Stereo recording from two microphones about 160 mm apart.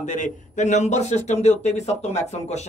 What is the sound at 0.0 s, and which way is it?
A man's voice, 50° left (ahead or behind).